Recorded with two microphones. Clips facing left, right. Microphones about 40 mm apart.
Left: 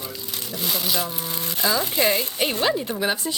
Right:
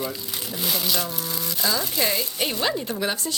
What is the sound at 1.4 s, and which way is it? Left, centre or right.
Speech, left.